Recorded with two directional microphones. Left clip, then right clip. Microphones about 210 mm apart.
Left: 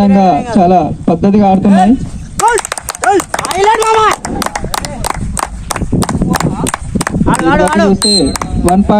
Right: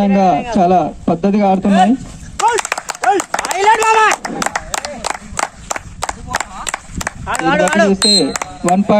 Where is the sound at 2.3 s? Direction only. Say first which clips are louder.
Left 3 dB; 45° left (ahead or behind).